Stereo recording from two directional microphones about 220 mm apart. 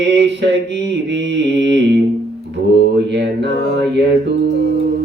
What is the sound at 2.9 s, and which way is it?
Mantra, 50° right (ahead or behind).